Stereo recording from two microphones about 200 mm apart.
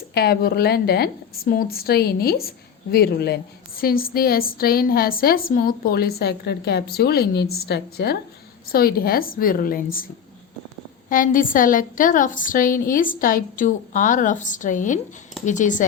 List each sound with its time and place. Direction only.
0.1 s a woman's voice: 55° left (ahead or behind)
11.1 s a woman's voice: 45° left (ahead or behind)